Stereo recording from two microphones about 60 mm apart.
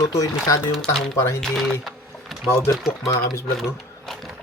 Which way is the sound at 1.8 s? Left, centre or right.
Centre.